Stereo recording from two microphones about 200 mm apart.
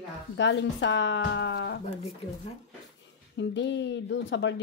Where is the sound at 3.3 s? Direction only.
60° left (ahead or behind).